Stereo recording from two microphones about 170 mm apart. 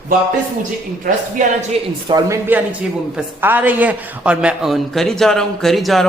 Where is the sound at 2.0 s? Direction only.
25° right (ahead or behind).